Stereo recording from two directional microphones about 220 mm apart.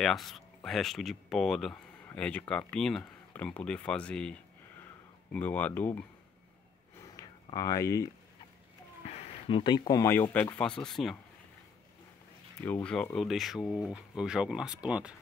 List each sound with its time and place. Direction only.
0.0 s speech: centre (ahead or behind)
7.2 s a sound: 15° left (ahead or behind)
9.5 s speech: 20° left (ahead or behind); by 11.1 s centre (ahead or behind)
12.6 s speech: 5° left (ahead or behind)